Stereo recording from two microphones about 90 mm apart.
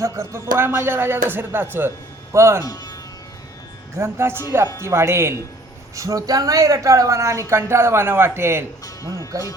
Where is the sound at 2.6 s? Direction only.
45° left (ahead or behind).